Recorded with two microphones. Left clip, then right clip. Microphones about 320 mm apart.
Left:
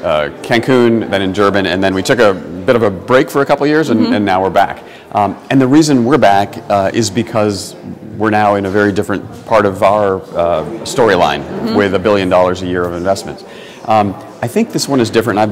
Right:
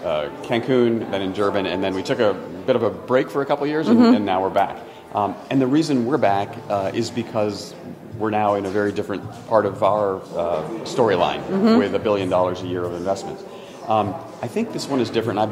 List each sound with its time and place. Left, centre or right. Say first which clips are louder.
0.0 s speech: left 9 dB; left